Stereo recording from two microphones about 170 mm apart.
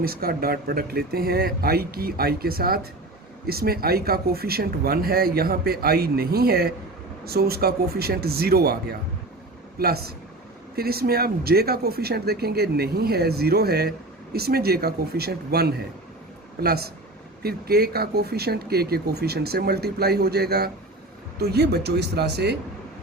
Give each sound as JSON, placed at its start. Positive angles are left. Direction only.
{"t": 0.0, "sound": "speech", "side_deg": -60}